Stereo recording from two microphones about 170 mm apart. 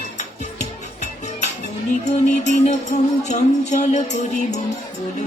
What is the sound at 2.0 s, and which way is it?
Music, 45° left (ahead or behind).